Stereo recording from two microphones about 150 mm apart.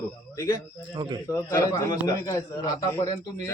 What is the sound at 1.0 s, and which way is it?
Speech, 35° right (ahead or behind).